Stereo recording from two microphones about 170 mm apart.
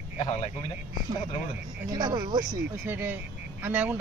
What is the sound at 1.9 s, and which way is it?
A man's voice, 25° right (ahead or behind).